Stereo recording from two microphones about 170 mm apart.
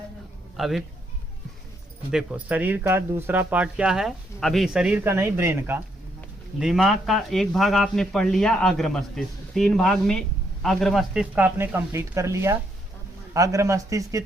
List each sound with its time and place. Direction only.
0.5 s speech: centre (ahead or behind)
2.0 s speech: 5° right (ahead or behind)
6.6 s speech: centre (ahead or behind); by 14.3 s 20° right (ahead or behind)